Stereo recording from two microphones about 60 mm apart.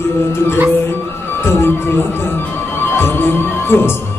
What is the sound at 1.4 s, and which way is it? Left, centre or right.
Speech, left.